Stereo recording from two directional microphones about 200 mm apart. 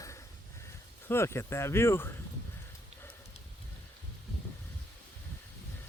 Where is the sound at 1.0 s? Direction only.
15° left (ahead or behind).